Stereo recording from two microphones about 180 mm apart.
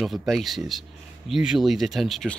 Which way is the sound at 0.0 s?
Centre (ahead or behind).